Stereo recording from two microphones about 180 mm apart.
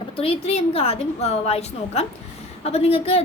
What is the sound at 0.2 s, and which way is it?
A woman's voice, 35° left (ahead or behind).